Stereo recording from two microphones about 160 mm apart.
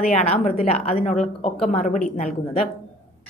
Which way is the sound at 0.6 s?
40° left (ahead or behind).